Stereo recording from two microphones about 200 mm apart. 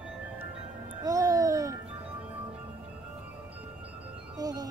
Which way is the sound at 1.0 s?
15° right (ahead or behind).